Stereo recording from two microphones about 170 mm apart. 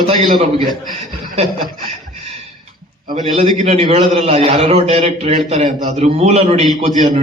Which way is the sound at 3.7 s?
40° right (ahead or behind).